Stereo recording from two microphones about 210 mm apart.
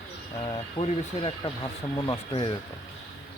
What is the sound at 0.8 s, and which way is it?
Speech, 25° left (ahead or behind).